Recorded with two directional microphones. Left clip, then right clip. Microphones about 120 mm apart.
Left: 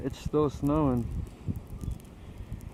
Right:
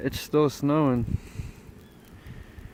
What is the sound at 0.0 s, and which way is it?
Speech, 20° right (ahead or behind).